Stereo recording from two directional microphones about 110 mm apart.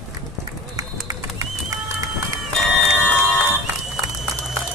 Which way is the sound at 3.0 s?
15° left (ahead or behind).